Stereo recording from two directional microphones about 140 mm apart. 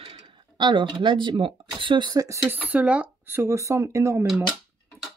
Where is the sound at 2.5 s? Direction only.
10° right (ahead or behind).